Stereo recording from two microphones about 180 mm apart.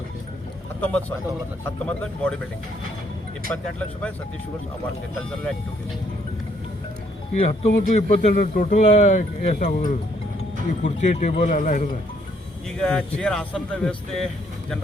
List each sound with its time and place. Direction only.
0.8 s speech: 10° left (ahead or behind)
3.5 s speech: 5° left (ahead or behind)
7.3 s a man's voice: 35° left (ahead or behind)
8.3 s speech: 45° left (ahead or behind)
12.8 s speech: 5° left (ahead or behind)